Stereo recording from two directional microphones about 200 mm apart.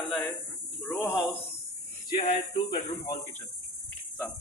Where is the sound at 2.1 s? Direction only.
25° left (ahead or behind).